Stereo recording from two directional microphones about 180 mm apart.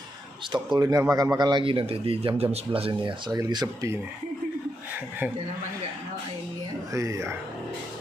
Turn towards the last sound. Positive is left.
turn(degrees=-15)  # may be behind; listen again after turning